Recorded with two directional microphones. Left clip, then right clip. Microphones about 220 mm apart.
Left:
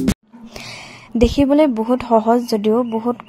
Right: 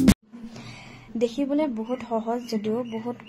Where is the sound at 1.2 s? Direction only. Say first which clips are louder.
Left 11 dB; 40° left (ahead or behind).